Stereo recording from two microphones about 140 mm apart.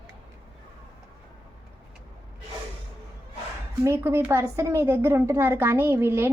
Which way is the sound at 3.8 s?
15° right (ahead or behind).